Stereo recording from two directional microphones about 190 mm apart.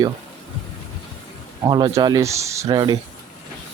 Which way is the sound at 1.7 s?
25° right (ahead or behind).